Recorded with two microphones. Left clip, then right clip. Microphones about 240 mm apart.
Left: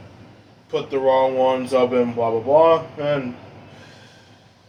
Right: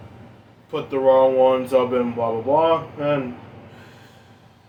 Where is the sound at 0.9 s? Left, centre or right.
Right.